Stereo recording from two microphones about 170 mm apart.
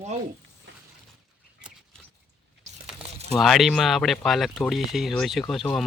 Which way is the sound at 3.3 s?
Centre (ahead or behind).